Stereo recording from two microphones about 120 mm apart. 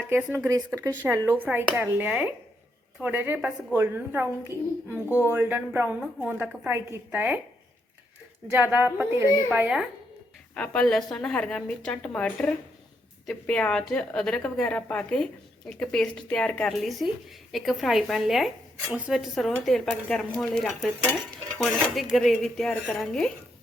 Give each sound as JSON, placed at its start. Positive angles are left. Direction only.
{"t": 0.1, "sound": "speech", "side_deg": -10}
{"t": 0.3, "sound": "speech", "side_deg": -25}
{"t": 8.7, "sound": "speech", "side_deg": -15}
{"t": 10.5, "sound": "a woman's voice", "side_deg": 10}